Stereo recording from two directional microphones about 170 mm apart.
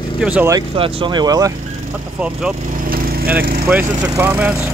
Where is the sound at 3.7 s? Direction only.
10° right (ahead or behind).